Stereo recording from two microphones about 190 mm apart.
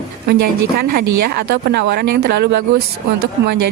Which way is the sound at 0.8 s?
55° right (ahead or behind).